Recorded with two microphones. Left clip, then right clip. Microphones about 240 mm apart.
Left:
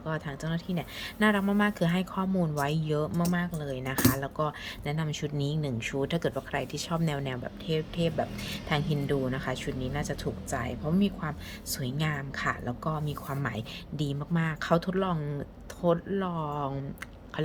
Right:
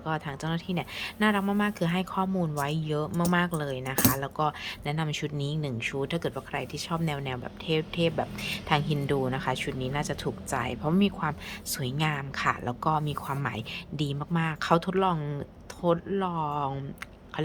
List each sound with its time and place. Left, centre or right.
0.0 s speech: centre